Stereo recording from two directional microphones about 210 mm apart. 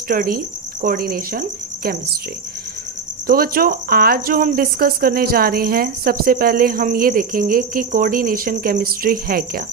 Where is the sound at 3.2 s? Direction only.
45° right (ahead or behind).